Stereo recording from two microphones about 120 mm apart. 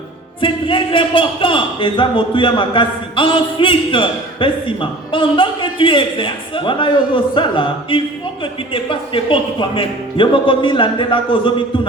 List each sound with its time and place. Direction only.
0.4 s speech: 45° left (ahead or behind)